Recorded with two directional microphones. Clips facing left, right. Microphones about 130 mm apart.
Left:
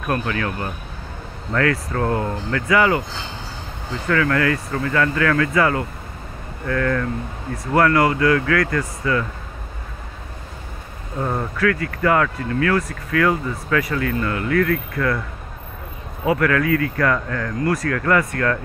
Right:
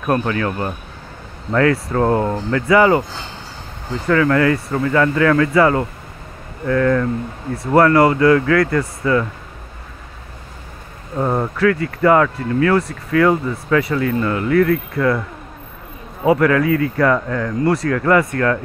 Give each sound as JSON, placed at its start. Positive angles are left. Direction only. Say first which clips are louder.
{"t": 0.1, "sound": "speech", "louder": "right 5 dB", "side_deg": -30}
{"t": 4.1, "sound": "speech", "louder": "right 4 dB", "side_deg": -30}
{"t": 11.5, "sound": "speech", "louder": "right 4 dB", "side_deg": -30}
{"t": 16.3, "sound": "speech", "louder": "right 4 dB", "side_deg": -30}